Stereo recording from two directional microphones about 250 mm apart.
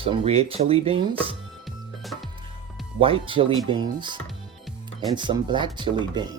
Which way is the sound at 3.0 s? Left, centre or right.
Right.